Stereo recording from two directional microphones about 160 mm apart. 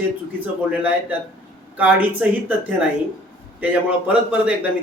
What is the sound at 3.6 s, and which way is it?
Speech, 10° right (ahead or behind).